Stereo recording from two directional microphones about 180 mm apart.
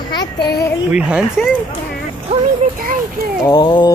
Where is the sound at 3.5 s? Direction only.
25° left (ahead or behind).